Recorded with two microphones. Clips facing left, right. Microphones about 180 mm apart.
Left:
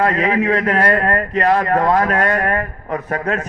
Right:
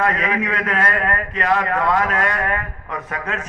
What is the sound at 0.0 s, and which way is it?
A man's voice, 35° left (ahead or behind).